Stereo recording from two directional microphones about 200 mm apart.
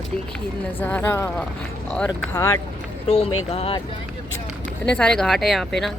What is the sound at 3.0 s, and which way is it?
Speech, 30° left (ahead or behind).